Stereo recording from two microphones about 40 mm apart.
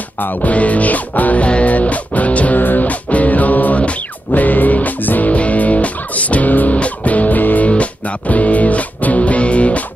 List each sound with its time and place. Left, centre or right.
0.2 s music: left
2.6 s music: left
5.3 s music: left